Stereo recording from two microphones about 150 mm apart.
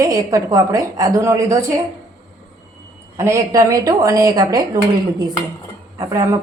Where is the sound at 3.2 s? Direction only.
20° right (ahead or behind).